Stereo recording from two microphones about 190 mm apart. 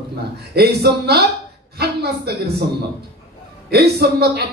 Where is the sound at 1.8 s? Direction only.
60° right (ahead or behind).